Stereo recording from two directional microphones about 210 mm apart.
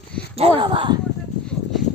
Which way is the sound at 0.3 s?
25° right (ahead or behind).